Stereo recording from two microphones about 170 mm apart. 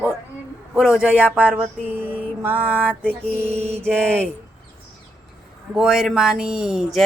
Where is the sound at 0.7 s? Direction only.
5° right (ahead or behind).